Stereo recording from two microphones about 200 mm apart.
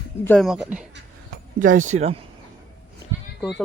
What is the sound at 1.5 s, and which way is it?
Speech, 40° right (ahead or behind).